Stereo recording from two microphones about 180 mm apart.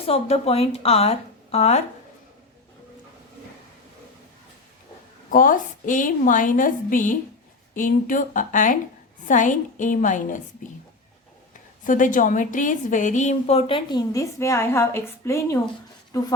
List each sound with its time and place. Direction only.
0.0 s a woman's voice: 35° left (ahead or behind)
5.3 s a woman's voice: 50° left (ahead or behind)
11.9 s a woman's voice: 45° left (ahead or behind); by 15.5 s 15° left (ahead or behind)